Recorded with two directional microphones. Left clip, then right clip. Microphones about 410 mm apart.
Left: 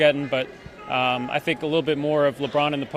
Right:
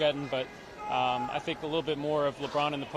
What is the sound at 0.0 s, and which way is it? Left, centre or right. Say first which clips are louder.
Speech: left 9 dB; left.